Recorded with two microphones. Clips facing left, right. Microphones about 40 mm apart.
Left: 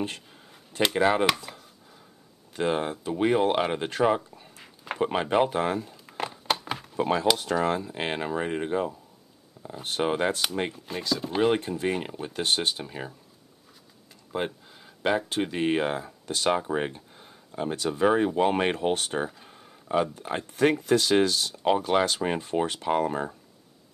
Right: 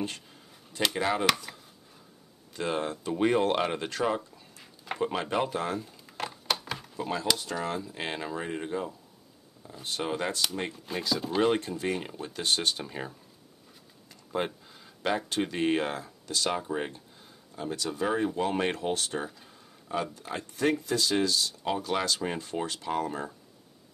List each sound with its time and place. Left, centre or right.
0.8 s speech: left
1.5 s a sound: centre
2.5 s speech: left
3.9 s speech: left
6.1 s a sound: centre
7.0 s speech: left
10.9 s speech: centre
11.2 s speech: centre
12.7 s speech: centre
14.3 s speech: centre
16.3 s speech: left